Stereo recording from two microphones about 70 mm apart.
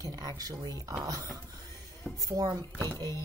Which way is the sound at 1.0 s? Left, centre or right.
Right.